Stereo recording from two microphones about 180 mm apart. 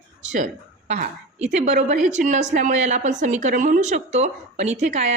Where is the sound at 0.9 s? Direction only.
40° right (ahead or behind).